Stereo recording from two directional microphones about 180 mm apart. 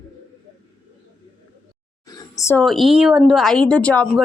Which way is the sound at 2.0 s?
15° left (ahead or behind).